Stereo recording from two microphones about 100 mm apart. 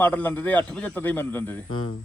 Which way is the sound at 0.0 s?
15° left (ahead or behind).